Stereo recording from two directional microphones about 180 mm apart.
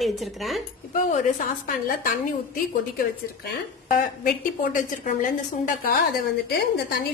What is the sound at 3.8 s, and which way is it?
A woman's voice, 50° left (ahead or behind).